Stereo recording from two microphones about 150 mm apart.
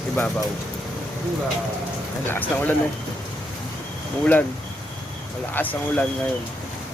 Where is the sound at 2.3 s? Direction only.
10° left (ahead or behind).